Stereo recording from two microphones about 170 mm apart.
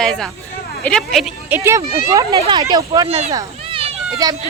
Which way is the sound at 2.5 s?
25° right (ahead or behind).